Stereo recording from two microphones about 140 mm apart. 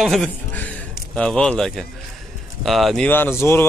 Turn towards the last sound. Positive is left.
turn(degrees=15)  # may be behind; listen again after turning